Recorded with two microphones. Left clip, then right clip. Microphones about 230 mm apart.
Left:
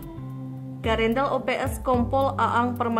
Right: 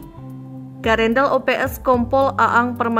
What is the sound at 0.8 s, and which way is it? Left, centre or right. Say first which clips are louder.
A woman's voice: right 7 dB; centre.